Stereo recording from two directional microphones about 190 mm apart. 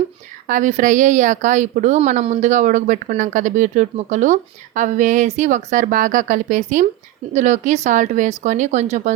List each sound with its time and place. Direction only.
0.4 s a woman's voice: 40° right (ahead or behind)